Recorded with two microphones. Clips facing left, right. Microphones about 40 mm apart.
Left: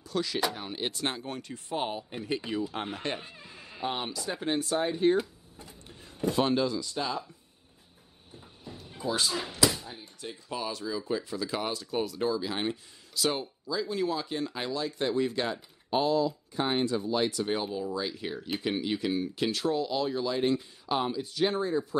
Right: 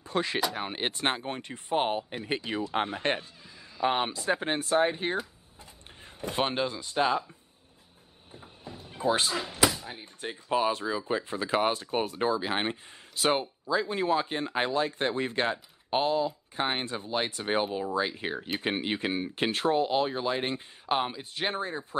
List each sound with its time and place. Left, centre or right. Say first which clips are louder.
0.0 s speech: right 1 dB; right
3.3 s music: left 2 dB; left
3.8 s speech: right 6 dB; right
6.2 s speech: left 3 dB; right
8.3 s a sound: right 1 dB; right
9.8 s speech: right 3 dB; right